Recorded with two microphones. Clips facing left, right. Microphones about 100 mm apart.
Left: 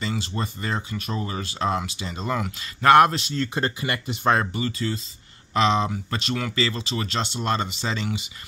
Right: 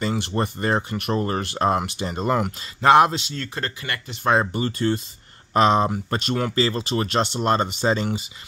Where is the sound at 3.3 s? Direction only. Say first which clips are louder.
Left 4 dB; 10° left (ahead or behind).